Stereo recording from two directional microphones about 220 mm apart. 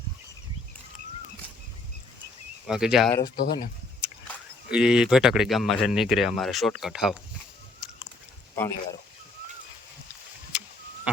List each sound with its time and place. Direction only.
2.6 s speech: centre (ahead or behind)
3.3 s speech: 45° left (ahead or behind)
4.7 s speech: 5° right (ahead or behind)
8.5 s speech: 10° left (ahead or behind)